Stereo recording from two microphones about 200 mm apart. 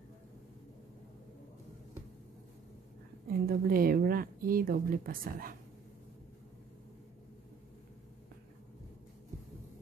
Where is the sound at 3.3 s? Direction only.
50° right (ahead or behind).